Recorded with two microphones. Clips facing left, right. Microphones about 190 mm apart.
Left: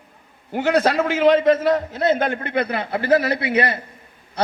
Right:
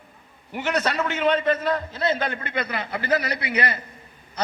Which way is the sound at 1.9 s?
55° left (ahead or behind).